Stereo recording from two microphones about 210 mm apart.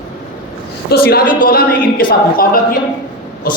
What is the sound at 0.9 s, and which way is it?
A woman's voice, 45° left (ahead or behind).